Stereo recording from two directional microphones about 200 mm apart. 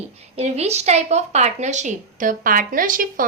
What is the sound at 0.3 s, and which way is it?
A woman's voice, 30° right (ahead or behind).